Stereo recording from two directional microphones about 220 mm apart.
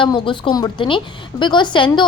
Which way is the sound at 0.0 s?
20° left (ahead or behind).